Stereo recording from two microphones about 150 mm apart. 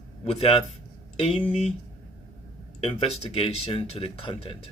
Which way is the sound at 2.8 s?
40° left (ahead or behind).